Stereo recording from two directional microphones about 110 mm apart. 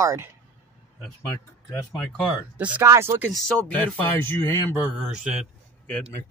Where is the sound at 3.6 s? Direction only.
15° left (ahead or behind).